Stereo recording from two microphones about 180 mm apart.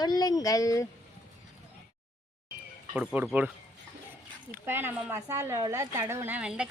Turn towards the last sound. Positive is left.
turn(degrees=-5)  # may be behind; listen again after turning